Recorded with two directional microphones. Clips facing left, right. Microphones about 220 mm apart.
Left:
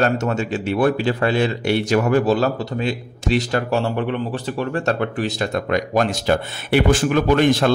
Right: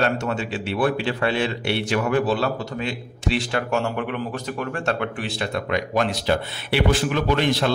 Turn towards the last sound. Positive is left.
turn(degrees=50)  # may be behind; listen again after turning